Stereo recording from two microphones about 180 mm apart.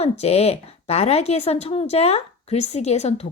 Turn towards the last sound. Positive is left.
turn(degrees=35)  # may be behind; listen again after turning